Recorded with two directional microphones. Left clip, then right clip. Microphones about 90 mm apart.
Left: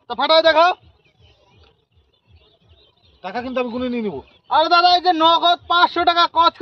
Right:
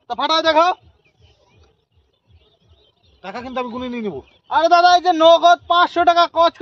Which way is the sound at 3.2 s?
40° right (ahead or behind).